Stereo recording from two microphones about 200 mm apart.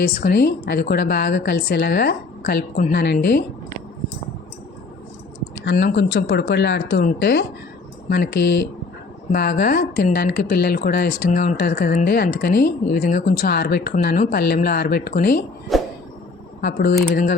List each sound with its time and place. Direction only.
0.0 s speech: 50° left (ahead or behind)
5.8 s speech: 60° left (ahead or behind)
7.0 s speech: 50° left (ahead or behind)
15.7 s a sound: centre (ahead or behind)
16.6 s speech: 50° left (ahead or behind)